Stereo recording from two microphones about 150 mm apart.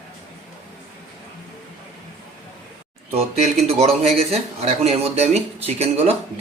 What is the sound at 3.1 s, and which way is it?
Speech, 40° right (ahead or behind).